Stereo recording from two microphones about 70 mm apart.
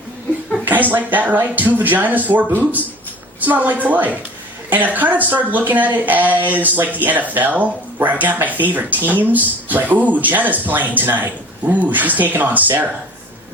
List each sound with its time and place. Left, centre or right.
0.6 s speech: right